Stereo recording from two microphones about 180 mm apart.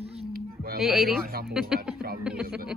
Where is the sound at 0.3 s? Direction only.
55° right (ahead or behind).